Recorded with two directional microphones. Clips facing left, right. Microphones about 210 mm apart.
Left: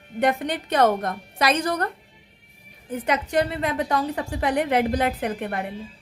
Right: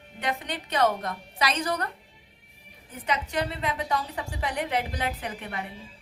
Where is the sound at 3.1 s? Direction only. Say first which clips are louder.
Left 6 dB; 55° left (ahead or behind).